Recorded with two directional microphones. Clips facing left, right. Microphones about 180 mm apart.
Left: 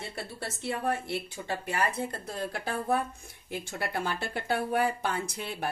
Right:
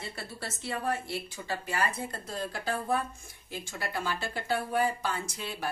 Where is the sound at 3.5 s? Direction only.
60° left (ahead or behind).